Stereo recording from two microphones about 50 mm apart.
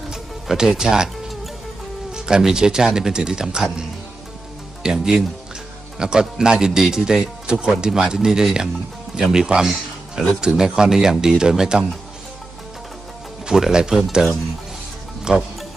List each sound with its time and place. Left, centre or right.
0.1 s speech: centre
2.1 s speech: centre
13.4 s speech: centre
15.3 s speech: centre